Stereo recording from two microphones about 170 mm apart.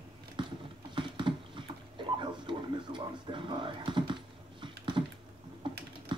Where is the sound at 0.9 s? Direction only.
30° right (ahead or behind).